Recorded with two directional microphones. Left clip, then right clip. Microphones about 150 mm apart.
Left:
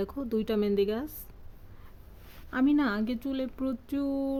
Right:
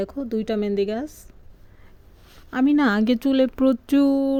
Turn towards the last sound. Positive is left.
turn(degrees=-45)  # may be behind; listen again after turning